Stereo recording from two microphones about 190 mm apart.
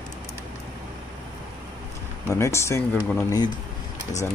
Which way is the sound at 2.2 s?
15° left (ahead or behind).